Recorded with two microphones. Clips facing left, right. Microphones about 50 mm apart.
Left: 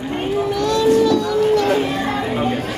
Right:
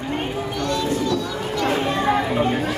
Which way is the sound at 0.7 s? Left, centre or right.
Left.